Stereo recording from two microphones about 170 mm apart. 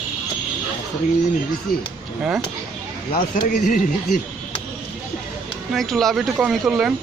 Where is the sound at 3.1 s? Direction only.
60° left (ahead or behind).